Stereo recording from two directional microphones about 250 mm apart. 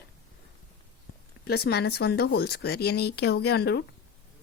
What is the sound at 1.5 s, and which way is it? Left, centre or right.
Speech, left.